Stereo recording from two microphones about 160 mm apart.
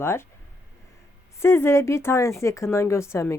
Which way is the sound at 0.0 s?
15° left (ahead or behind).